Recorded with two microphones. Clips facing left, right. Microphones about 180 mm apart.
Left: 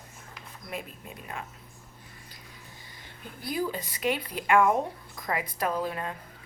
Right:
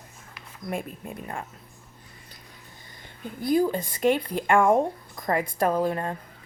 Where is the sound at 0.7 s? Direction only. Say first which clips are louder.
Right 6 dB; 45° right (ahead or behind).